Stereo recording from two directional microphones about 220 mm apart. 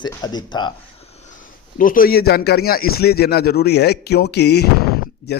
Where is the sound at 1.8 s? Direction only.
40° left (ahead or behind).